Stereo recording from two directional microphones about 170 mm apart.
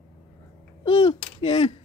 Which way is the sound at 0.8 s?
35° left (ahead or behind).